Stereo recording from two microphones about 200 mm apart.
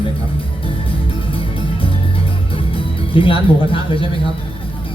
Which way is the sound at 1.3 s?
25° left (ahead or behind).